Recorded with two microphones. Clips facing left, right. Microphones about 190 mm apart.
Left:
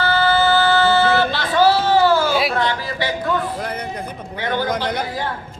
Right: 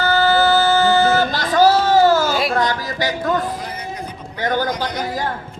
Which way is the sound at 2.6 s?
40° right (ahead or behind).